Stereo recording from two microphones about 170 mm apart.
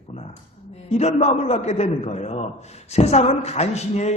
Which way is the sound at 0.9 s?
40° left (ahead or behind).